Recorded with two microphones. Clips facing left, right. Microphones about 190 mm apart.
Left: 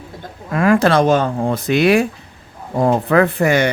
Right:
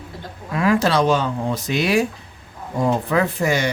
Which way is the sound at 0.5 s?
50° left (ahead or behind).